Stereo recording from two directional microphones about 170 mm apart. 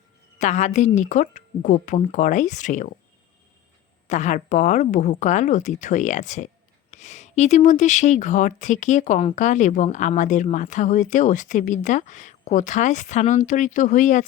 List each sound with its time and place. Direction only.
0.3 s speech: 45° left (ahead or behind)
4.0 s speech: 45° left (ahead or behind)